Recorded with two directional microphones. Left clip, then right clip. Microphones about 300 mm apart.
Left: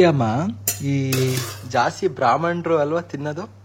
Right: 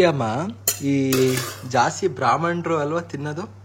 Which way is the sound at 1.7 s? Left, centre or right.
Centre.